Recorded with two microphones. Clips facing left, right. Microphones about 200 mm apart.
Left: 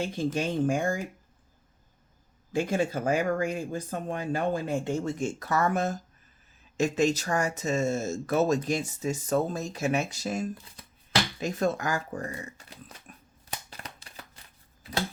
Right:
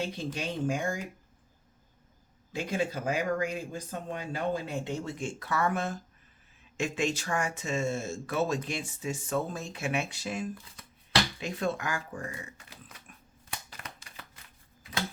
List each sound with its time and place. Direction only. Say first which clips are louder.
0.0 s speech: left 5 dB; 50° left (ahead or behind)
2.5 s speech: left 4 dB; 50° left (ahead or behind)
13.7 s shuffling cards: left 2 dB; 35° left (ahead or behind)